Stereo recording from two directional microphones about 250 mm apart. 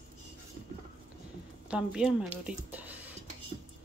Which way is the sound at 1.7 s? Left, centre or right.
Centre.